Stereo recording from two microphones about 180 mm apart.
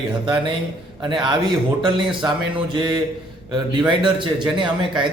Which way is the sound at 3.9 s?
25° right (ahead or behind).